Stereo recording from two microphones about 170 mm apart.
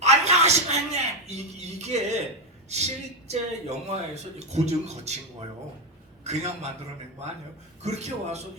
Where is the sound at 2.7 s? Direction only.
40° right (ahead or behind).